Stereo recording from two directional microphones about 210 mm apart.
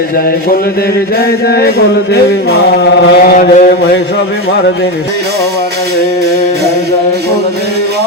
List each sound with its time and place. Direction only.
1.2 s mantra: 45° left (ahead or behind)